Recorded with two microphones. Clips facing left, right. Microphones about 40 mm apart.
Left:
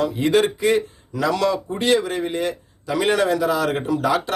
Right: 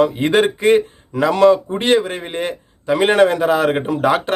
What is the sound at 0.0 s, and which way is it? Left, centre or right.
Speech, right.